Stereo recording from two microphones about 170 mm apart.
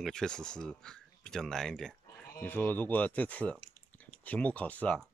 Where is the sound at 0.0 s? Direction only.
5° left (ahead or behind).